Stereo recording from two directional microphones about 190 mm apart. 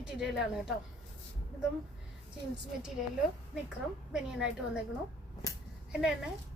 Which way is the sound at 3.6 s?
5° right (ahead or behind).